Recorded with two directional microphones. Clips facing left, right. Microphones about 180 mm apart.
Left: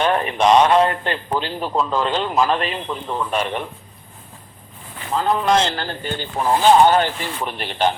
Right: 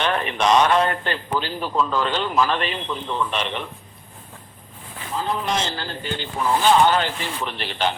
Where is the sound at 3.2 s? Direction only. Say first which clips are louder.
Left 3 dB; 10° left (ahead or behind).